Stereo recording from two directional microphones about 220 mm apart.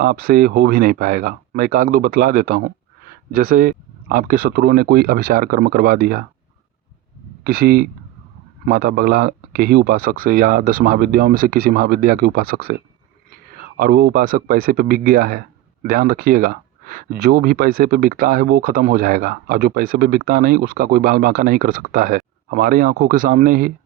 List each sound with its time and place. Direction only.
0.0 s speech: 40° right (ahead or behind)
7.4 s speech: 45° right (ahead or behind)